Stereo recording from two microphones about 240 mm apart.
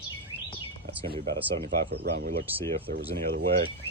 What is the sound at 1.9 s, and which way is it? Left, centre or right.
Speech, right.